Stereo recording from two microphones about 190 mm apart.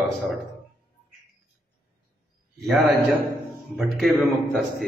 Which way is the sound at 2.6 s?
5° right (ahead or behind).